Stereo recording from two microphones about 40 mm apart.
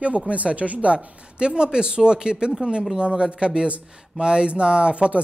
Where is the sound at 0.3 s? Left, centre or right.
Right.